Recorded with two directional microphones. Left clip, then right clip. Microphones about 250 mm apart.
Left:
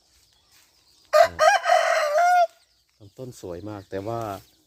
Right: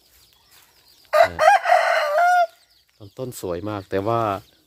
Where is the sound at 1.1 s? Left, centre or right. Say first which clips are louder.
Right 2 dB; left.